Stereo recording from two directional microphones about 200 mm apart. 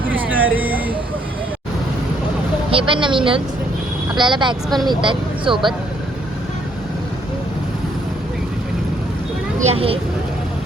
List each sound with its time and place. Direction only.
0.0 s vehicle: 10° right (ahead or behind)
2.6 s speech: 25° right (ahead or behind)
9.6 s speech: 30° right (ahead or behind)